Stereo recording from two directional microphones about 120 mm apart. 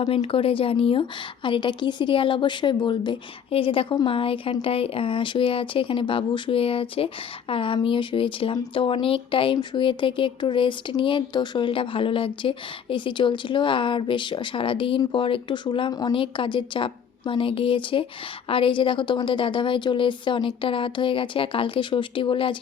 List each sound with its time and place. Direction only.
0.0 s speech: 60° left (ahead or behind); by 16.1 s 35° left (ahead or behind)
16.1 s speech: 45° left (ahead or behind)